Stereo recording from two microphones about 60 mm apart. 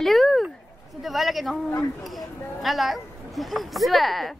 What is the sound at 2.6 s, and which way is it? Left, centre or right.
Speech, centre.